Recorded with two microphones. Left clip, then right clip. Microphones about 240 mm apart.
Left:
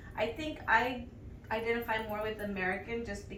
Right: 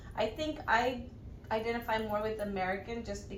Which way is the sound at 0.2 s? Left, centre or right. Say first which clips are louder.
Right 1 dB; centre.